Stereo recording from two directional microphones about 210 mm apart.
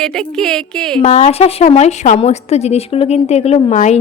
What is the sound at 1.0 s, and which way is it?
A woman's voice, 30° left (ahead or behind).